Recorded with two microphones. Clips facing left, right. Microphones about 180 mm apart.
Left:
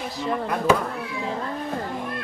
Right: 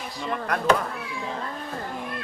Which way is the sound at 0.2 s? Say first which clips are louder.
Left 2 dB; 5° left (ahead or behind).